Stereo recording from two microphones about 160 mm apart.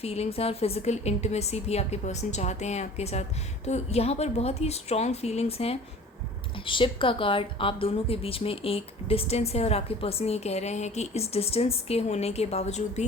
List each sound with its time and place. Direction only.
0.0 s a woman's voice: 40° left (ahead or behind)